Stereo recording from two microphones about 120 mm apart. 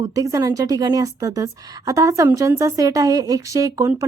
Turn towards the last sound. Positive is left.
turn(degrees=-30)  # may be behind; listen again after turning